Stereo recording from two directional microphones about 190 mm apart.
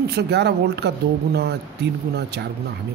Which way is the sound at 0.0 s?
60° right (ahead or behind).